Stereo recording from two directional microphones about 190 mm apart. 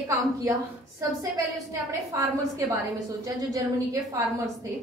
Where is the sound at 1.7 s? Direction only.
15° right (ahead or behind).